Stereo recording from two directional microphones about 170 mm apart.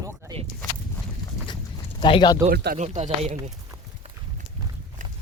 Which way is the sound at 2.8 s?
45° right (ahead or behind).